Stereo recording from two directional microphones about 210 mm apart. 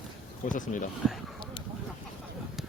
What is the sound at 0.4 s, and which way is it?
Speech, 40° left (ahead or behind).